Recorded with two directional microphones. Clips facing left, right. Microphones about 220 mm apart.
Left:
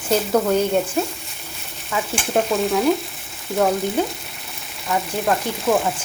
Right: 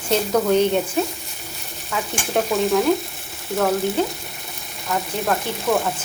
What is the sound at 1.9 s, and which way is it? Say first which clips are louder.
Stir: left 2 dB; centre (ahead or behind).